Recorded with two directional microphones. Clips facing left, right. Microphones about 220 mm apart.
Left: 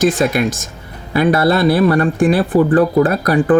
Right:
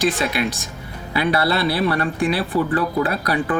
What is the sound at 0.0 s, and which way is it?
Speech, 45° left (ahead or behind).